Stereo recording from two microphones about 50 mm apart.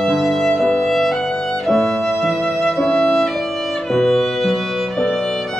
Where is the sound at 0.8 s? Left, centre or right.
Centre.